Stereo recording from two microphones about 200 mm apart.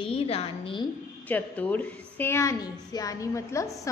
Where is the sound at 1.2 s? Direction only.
10° left (ahead or behind).